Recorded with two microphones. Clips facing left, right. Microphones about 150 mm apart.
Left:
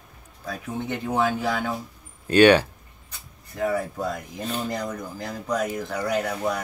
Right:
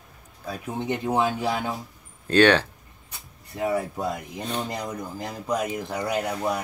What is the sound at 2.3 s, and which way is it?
Speech, 10° left (ahead or behind).